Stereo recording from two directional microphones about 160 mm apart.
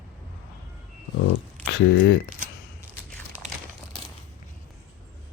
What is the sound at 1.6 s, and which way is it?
Speech, 90° left.